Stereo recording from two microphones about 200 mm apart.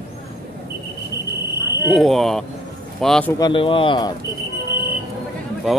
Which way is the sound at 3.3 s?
20° left (ahead or behind).